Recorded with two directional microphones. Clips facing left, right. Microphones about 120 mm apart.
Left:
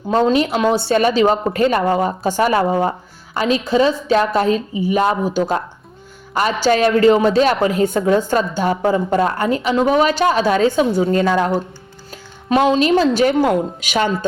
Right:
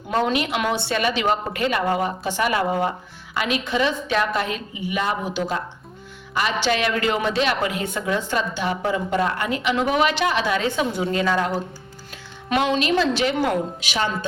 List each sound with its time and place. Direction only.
0.1 s a man's voice: 30° left (ahead or behind)
12.5 s a woman's voice: 35° left (ahead or behind)